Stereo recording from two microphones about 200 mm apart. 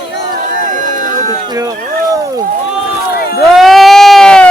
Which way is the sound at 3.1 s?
50° left (ahead or behind).